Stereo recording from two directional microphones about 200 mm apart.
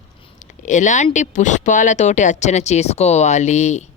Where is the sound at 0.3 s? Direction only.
40° left (ahead or behind).